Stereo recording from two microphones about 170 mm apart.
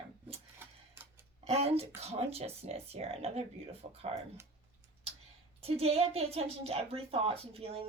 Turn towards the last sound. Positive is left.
turn(degrees=-35)  # may be behind; listen again after turning